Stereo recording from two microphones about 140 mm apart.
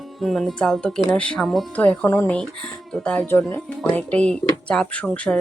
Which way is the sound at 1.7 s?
10° left (ahead or behind).